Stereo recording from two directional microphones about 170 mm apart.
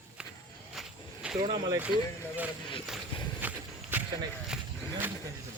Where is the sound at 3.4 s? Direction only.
10° right (ahead or behind).